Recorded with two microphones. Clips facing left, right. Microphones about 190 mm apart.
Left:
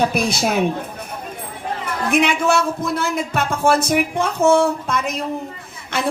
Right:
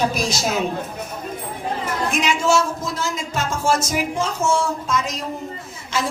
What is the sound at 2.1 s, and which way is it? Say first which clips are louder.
Speech: left 3 dB; 60° left (ahead or behind).